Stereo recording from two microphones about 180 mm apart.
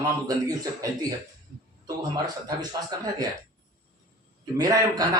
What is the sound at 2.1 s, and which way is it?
Speech, 25° right (ahead or behind).